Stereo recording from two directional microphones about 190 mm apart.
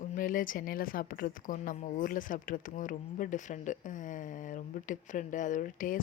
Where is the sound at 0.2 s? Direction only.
45° left (ahead or behind).